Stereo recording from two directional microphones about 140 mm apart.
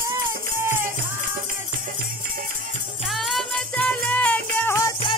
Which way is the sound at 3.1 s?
Centre (ahead or behind).